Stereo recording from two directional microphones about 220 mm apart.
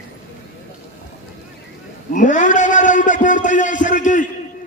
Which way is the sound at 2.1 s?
35° left (ahead or behind).